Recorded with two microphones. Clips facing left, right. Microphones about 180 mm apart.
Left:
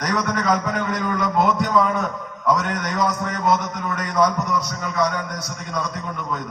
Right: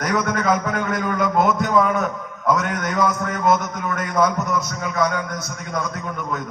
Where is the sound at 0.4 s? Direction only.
45° right (ahead or behind).